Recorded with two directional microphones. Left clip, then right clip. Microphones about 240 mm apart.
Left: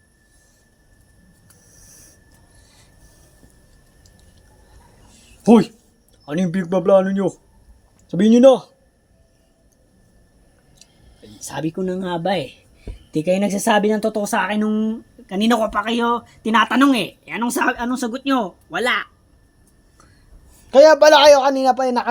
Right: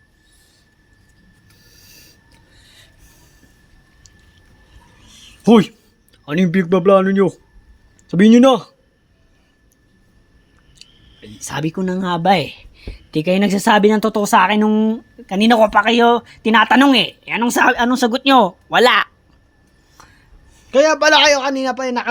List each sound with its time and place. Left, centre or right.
5.5 s speech: right
11.3 s speech: right
20.7 s a man's voice: centre